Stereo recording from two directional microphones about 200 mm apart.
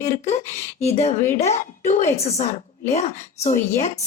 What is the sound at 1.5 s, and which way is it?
A woman's voice, 35° left (ahead or behind).